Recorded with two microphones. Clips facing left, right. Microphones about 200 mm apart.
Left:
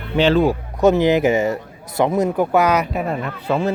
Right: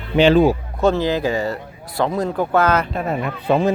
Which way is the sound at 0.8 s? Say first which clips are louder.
Left 4 dB; 20° left (ahead or behind).